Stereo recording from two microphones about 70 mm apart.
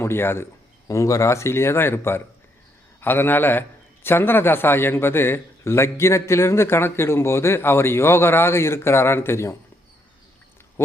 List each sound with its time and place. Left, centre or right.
0.0 s a man's voice: left
0.9 s a man's voice: left
10.8 s speech: left